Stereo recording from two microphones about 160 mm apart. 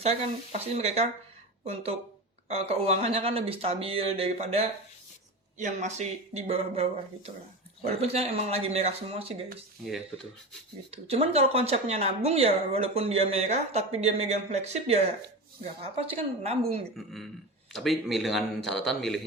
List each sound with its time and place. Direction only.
0.6 s speech: 40° right (ahead or behind)
5.5 s speech: 50° right (ahead or behind)
10.9 s speech: 40° right (ahead or behind)
17.0 s speech: centre (ahead or behind)